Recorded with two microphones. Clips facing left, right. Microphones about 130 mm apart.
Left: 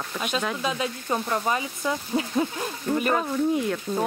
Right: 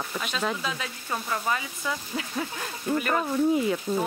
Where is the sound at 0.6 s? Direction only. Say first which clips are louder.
Left 6 dB; 20° left (ahead or behind).